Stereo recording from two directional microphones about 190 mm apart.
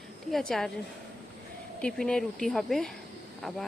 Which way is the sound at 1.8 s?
5° left (ahead or behind).